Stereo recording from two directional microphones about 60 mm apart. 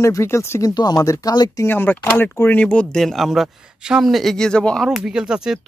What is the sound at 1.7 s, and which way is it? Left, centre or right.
Speech, left.